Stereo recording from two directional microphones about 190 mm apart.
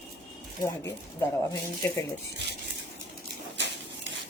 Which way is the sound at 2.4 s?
65° right (ahead or behind).